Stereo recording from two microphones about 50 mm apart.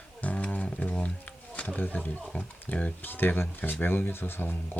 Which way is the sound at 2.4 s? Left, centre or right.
Left.